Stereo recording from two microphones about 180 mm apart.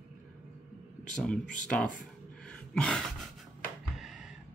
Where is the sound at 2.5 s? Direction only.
5° left (ahead or behind).